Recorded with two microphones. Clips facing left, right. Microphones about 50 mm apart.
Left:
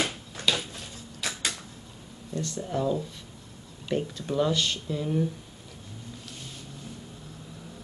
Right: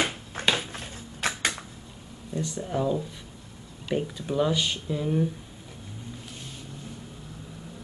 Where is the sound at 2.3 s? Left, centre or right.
Centre.